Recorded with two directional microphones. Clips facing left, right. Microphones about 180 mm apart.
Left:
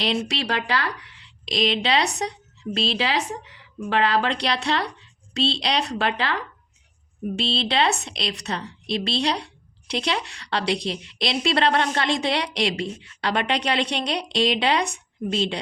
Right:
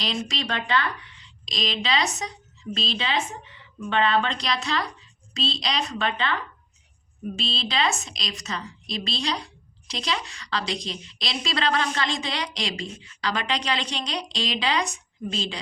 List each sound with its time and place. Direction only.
0.0 s speech: 65° left (ahead or behind)
7.3 s a woman's voice: 65° left (ahead or behind)